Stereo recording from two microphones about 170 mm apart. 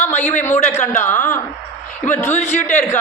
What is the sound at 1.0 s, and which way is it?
A man's voice, 15° left (ahead or behind).